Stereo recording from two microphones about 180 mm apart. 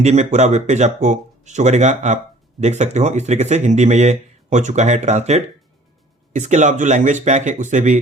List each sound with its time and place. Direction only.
0.0 s speech: 40° right (ahead or behind)